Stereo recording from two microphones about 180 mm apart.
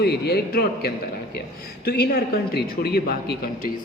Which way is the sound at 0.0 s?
60° left (ahead or behind).